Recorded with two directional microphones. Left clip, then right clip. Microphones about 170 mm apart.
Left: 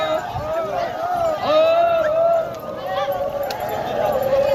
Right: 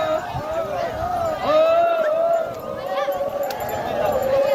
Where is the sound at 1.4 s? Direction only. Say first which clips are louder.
Even; 55° right (ahead or behind).